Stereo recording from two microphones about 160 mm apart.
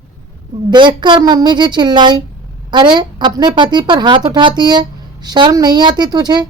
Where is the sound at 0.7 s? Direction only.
30° right (ahead or behind).